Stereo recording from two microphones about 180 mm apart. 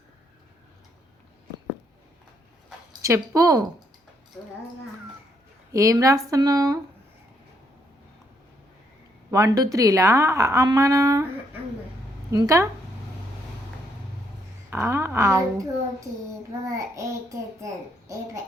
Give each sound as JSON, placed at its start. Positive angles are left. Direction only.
{"t": 3.0, "sound": "speech", "side_deg": -15}
{"t": 5.7, "sound": "a woman's voice", "side_deg": -15}
{"t": 9.3, "sound": "a woman's voice", "side_deg": -20}
{"t": 12.3, "sound": "speech", "side_deg": -20}
{"t": 14.7, "sound": "a woman's voice", "side_deg": -15}